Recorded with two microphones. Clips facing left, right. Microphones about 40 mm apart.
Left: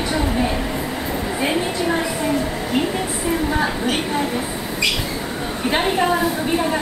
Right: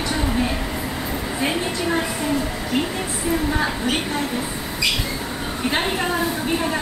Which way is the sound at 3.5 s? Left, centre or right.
Centre.